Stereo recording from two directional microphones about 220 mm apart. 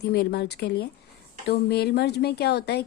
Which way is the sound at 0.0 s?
45° left (ahead or behind).